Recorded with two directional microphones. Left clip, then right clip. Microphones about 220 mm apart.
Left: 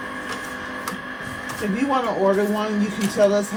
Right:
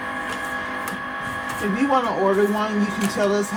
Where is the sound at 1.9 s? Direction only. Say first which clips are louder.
Even; 25° right (ahead or behind).